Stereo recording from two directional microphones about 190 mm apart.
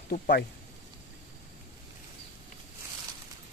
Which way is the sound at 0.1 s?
60° left (ahead or behind).